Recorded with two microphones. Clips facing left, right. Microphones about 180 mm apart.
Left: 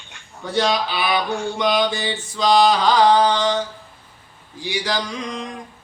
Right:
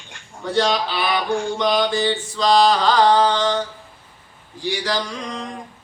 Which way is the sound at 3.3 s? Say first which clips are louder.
Even; 20° left (ahead or behind).